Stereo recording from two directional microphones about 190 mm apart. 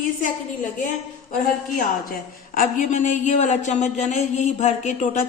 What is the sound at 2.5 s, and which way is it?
A woman's voice, 40° left (ahead or behind).